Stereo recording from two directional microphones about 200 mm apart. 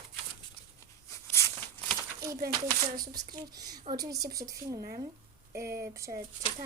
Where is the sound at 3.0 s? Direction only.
20° right (ahead or behind).